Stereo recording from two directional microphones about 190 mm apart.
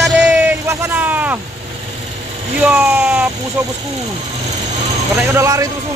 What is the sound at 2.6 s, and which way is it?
Speech, 10° right (ahead or behind).